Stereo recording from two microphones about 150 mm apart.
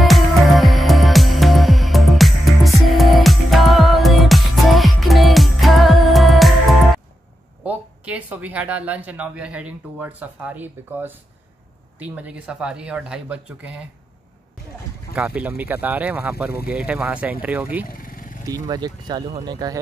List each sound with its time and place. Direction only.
0.0 s music: centre (ahead or behind)
7.6 s speech: 10° right (ahead or behind)
15.1 s speech: 10° right (ahead or behind)
17.8 s vehicle: 70° left (ahead or behind)
18.4 s speech: 25° right (ahead or behind)